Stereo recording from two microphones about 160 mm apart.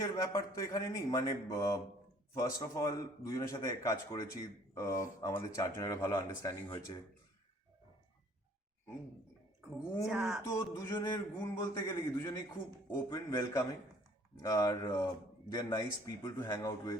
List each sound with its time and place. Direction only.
0.0 s speech: 20° left (ahead or behind)
9.6 s a sound: 10° right (ahead or behind)
10.4 s speech: 20° left (ahead or behind)